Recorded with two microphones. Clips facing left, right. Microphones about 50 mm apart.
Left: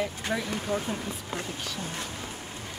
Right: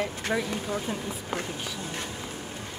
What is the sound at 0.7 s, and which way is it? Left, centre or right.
Speech, left.